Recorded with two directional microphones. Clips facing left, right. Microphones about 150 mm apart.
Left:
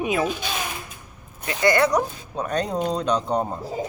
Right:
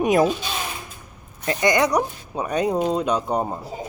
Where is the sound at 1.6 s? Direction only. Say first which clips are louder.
Left 1 dB; 15° right (ahead or behind).